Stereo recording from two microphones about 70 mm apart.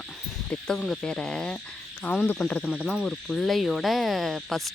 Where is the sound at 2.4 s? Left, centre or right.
Centre.